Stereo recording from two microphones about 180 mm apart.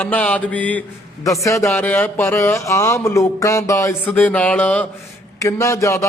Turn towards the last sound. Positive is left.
turn(degrees=15)  # may be behind; listen again after turning